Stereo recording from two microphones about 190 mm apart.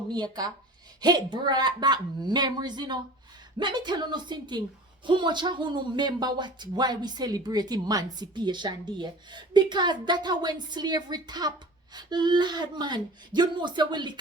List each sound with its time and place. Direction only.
0.1 s speech: 20° right (ahead or behind)